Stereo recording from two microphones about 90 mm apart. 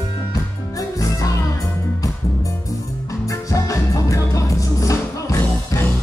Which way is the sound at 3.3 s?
35° left (ahead or behind).